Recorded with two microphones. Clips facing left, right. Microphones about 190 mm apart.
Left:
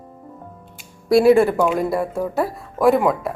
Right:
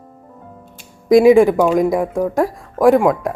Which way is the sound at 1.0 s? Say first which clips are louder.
Right 4 dB; 15° right (ahead or behind).